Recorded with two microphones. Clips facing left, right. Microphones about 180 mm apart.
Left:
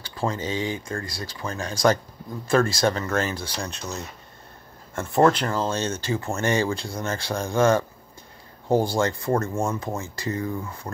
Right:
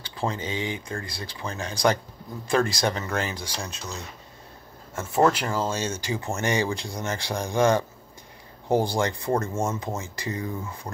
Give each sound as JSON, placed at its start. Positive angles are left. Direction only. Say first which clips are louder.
{"t": 0.0, "sound": "speech", "louder": "left 2 dB", "side_deg": -20}
{"t": 4.9, "sound": "speech", "louder": "left 2 dB", "side_deg": -5}